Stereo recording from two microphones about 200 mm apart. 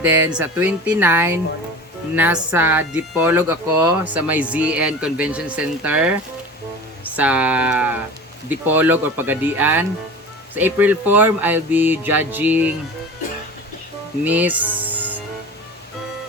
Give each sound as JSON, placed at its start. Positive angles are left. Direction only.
{"t": 0.0, "sound": "speech", "side_deg": -10}
{"t": 7.2, "sound": "speech", "side_deg": -5}
{"t": 14.3, "sound": "speech", "side_deg": -10}